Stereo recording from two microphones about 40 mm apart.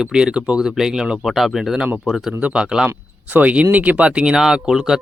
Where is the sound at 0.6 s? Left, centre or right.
Centre.